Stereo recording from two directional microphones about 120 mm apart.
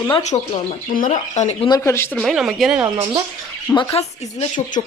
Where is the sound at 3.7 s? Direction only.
40° left (ahead or behind).